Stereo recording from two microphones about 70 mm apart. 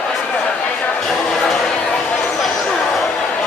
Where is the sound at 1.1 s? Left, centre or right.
Centre.